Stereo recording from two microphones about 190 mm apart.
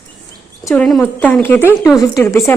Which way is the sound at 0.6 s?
5° left (ahead or behind).